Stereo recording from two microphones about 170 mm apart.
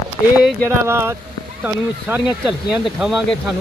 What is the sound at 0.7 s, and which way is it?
Speech, 15° right (ahead or behind).